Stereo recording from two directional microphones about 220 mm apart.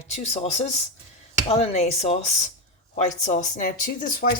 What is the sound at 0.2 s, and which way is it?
Speech, 30° left (ahead or behind).